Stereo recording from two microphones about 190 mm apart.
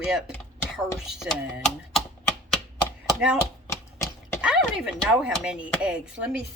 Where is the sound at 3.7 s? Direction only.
15° left (ahead or behind).